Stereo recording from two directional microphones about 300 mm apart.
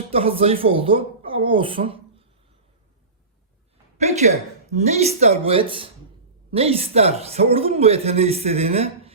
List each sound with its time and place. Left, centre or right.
0.1 s a woman's voice: centre
3.9 s speech: right